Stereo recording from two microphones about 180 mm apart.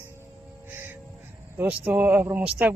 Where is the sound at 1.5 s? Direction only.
10° right (ahead or behind).